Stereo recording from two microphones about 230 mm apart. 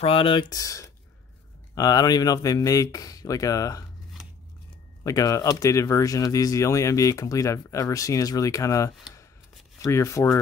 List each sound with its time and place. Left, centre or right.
0.0 s speech: left
5.0 s speech: centre